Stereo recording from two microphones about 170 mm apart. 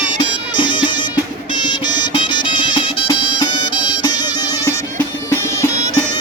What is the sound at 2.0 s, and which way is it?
Music, 30° left (ahead or behind).